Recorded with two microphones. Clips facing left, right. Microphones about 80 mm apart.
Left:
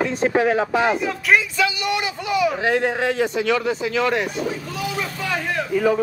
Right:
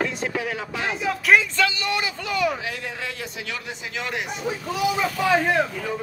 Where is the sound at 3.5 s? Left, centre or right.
Left.